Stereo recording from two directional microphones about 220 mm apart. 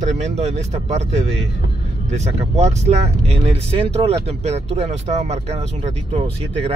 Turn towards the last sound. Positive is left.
turn(degrees=-25)  # may be behind; listen again after turning